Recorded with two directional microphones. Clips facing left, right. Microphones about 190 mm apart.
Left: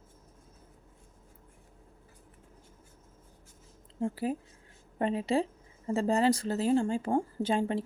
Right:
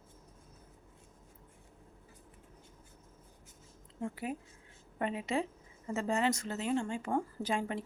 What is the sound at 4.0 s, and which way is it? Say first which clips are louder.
Speech: left 6 dB; 30° left (ahead or behind).